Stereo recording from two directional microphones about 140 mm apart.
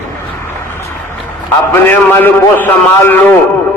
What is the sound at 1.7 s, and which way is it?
A man's voice, 15° left (ahead or behind).